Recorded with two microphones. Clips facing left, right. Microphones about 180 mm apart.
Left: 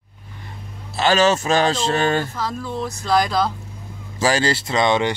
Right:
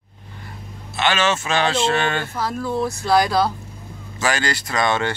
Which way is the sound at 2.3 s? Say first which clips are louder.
Right 3 dB; 10° right (ahead or behind).